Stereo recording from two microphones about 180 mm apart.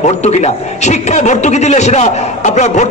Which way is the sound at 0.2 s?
40° left (ahead or behind).